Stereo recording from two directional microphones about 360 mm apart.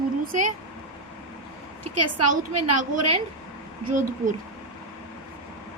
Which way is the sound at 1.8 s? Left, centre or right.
Right.